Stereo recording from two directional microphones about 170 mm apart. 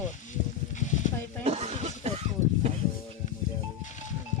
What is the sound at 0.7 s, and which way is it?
Stir, 45° left (ahead or behind).